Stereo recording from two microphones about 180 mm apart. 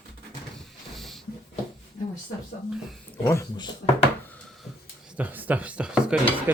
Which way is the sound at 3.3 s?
20° left (ahead or behind).